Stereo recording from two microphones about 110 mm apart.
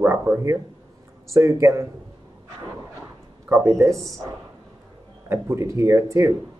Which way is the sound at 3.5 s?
25° right (ahead or behind).